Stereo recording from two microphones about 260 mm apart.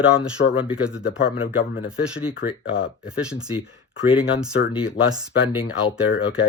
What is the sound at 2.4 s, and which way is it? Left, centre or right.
Speech, left.